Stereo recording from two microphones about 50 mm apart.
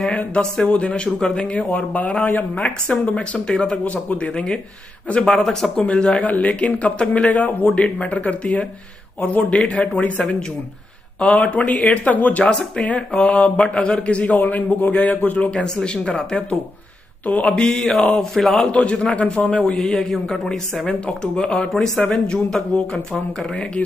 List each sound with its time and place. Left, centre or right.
0.1 s a man's voice: left
3.8 s a man's voice: left
5.3 s speech: centre
5.8 s a man's voice: left
12.4 s a man's voice: centre
15.6 s a man's voice: centre
17.6 s a man's voice: centre
18.7 s a man's voice: left
19.8 s speech: centre
23.5 s a man's voice: left